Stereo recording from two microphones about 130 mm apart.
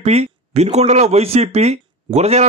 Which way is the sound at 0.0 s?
55° right (ahead or behind).